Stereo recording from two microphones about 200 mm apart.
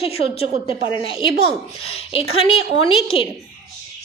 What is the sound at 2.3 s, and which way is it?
Speech, 25° left (ahead or behind).